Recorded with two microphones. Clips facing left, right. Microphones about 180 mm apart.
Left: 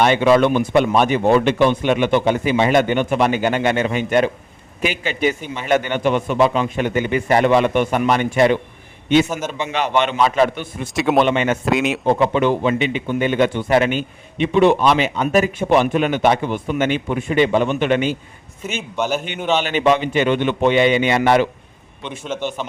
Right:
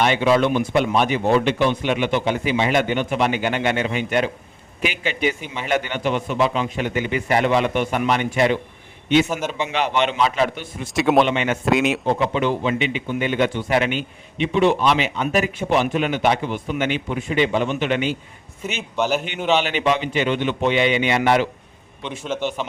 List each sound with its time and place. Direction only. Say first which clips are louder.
0.0 s a man's voice: left 4 dB; 50° left (ahead or behind)
9.7 s a man's voice: left 3 dB; 50° left (ahead or behind)
10.9 s a man's voice: even; centre (ahead or behind)
11.3 s a man's voice: left 4 dB; 45° left (ahead or behind)
11.6 s a man's voice: even; centre (ahead or behind)
12.0 s a man's voice: left 4 dB; 55° left (ahead or behind)
18.8 s a man's voice: even; 5° right (ahead or behind)
19.6 s a man's voice: left 4 dB; 50° left (ahead or behind)